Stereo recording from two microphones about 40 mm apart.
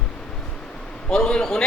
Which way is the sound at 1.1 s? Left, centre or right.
Centre.